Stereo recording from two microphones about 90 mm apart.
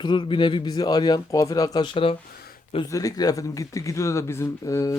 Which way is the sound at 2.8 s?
40° left (ahead or behind).